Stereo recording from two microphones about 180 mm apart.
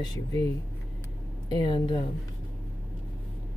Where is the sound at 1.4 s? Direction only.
25° left (ahead or behind).